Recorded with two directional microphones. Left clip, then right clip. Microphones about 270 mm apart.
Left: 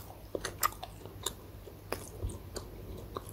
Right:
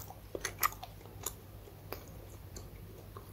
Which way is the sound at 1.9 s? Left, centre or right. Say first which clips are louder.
Left 7 dB; centre.